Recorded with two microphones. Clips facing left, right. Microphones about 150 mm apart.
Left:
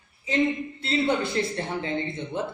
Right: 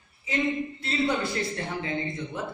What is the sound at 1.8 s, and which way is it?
Speech, 30° left (ahead or behind).